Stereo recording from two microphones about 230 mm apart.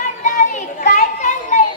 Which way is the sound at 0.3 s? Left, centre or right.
Left.